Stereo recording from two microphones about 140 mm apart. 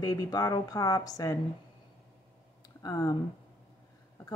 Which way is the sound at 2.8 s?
25° left (ahead or behind).